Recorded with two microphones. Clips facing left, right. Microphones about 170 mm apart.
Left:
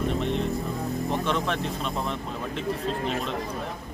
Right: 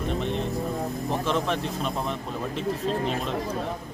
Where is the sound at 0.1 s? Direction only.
Centre (ahead or behind).